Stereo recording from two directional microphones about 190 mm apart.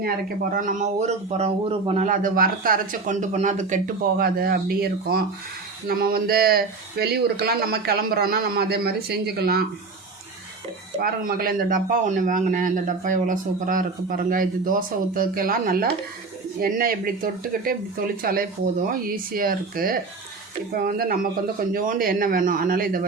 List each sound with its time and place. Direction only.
0.5 s a man's voice: 45° right (ahead or behind)
2.0 s a man's voice: 45° right (ahead or behind)
4.2 s a man's voice: 50° right (ahead or behind)
11.0 s a man's voice: 50° right (ahead or behind)